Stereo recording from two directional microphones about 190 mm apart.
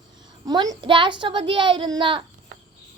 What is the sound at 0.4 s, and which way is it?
A child's voice, 20° right (ahead or behind).